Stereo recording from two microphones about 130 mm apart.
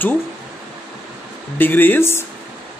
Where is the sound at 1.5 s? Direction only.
15° left (ahead or behind).